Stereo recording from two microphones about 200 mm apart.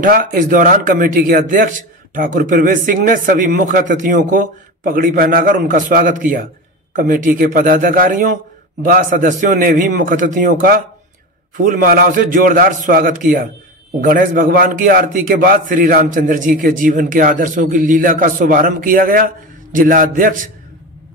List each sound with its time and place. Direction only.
0.0 s a man's voice: 45° right (ahead or behind)